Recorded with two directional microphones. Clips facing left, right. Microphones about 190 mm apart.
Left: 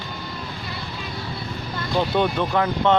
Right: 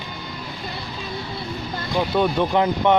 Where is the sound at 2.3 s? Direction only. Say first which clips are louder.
Right 2 dB; 15° right (ahead or behind).